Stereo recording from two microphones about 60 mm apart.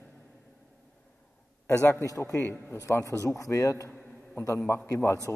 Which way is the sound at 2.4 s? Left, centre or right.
Left.